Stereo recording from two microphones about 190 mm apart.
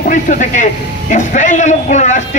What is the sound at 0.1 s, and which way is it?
A man's voice, 40° left (ahead or behind).